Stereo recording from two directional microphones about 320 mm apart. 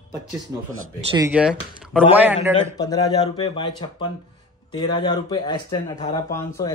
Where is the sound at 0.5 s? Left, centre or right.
Centre.